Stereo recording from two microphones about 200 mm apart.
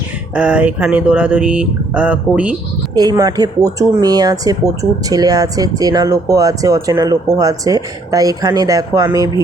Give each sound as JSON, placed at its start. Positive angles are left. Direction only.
{"t": 0.3, "sound": "speech", "side_deg": -5}
{"t": 2.9, "sound": "speech", "side_deg": -20}